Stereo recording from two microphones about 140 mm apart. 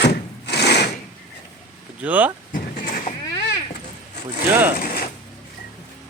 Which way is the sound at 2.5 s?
75° left (ahead or behind).